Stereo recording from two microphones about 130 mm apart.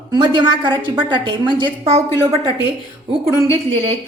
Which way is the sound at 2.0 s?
20° left (ahead or behind).